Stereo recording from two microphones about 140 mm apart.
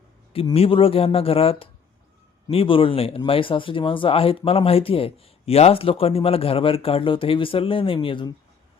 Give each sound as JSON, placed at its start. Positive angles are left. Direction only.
{"t": 0.5, "sound": "speech", "side_deg": 40}